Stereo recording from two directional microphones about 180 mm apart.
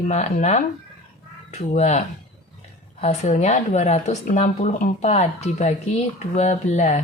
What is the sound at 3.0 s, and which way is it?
Speech, 40° left (ahead or behind).